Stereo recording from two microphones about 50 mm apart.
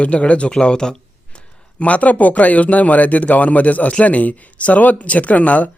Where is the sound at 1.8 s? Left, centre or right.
Left.